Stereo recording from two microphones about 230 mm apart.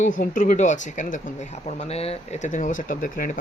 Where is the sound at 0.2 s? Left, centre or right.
Left.